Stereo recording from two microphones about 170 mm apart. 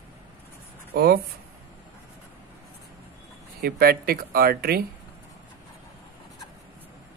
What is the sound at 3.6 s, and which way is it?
Speech, 65° right (ahead or behind).